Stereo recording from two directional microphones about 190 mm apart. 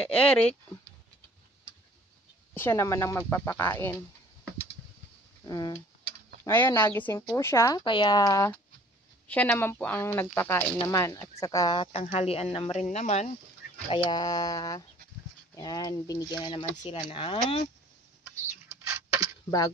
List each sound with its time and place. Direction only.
0.0 s speech: 5° left (ahead or behind)
2.5 s speech: 10° left (ahead or behind)
5.4 s speech: 20° left (ahead or behind)
18.9 s a sound: 10° right (ahead or behind)